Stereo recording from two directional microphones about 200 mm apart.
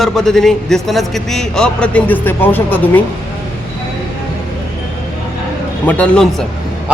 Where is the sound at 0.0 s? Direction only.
Centre (ahead or behind).